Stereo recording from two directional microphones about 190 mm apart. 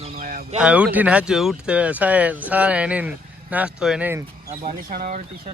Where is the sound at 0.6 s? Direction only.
5° right (ahead or behind).